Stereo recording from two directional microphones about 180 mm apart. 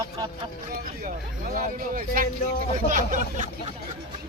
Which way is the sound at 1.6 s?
50° right (ahead or behind).